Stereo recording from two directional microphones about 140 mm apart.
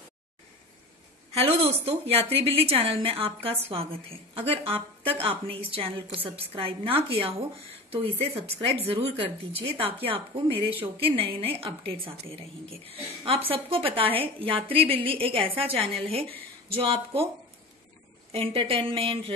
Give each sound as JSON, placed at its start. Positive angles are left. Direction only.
{"t": 1.3, "sound": "a woman's voice", "side_deg": -45}
{"t": 18.3, "sound": "a woman's voice", "side_deg": -40}